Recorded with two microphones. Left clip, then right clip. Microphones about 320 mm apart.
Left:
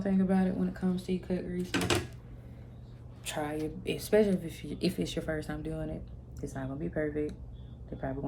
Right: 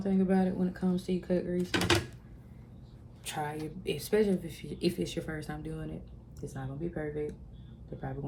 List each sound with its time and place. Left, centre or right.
0.0 s speech: centre
1.7 s speech: right
3.2 s a woman's voice: centre